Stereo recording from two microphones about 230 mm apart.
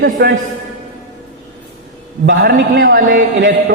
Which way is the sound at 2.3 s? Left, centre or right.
Right.